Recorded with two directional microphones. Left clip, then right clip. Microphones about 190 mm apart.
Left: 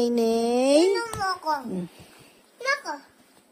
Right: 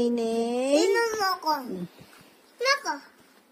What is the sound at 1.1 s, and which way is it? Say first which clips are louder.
Speech: right 1 dB; 55° right (ahead or behind).